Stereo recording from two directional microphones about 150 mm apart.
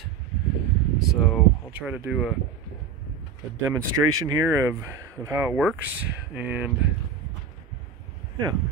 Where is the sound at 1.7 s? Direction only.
10° right (ahead or behind).